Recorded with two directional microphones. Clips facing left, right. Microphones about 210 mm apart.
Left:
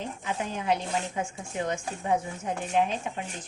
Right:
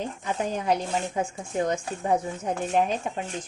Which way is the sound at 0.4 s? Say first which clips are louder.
Right 3 dB; 40° right (ahead or behind).